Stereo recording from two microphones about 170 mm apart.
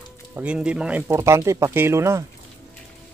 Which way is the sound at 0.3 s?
10° right (ahead or behind).